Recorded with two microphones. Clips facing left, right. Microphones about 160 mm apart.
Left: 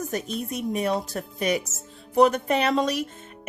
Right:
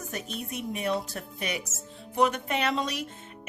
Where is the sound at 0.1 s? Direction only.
40° left (ahead or behind).